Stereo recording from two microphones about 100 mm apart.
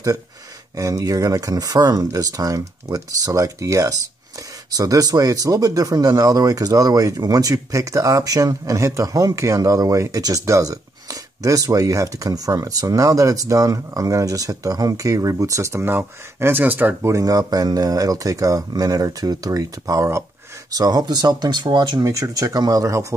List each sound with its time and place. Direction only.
0.7 s speech: 35° right (ahead or behind); by 17.1 s 20° right (ahead or behind)
17.1 s speech: 35° right (ahead or behind)
22.0 s speech: 35° right (ahead or behind)